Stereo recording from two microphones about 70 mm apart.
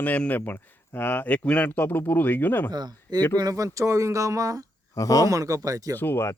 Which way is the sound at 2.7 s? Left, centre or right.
Right.